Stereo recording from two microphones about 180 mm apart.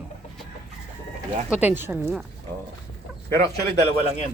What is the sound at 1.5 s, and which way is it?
Speech, 10° right (ahead or behind).